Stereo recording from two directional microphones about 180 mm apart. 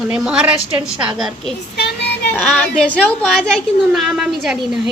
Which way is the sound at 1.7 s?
65° left (ahead or behind).